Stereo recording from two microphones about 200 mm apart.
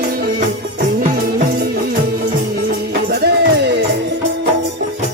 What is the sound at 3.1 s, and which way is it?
Music, 55° right (ahead or behind).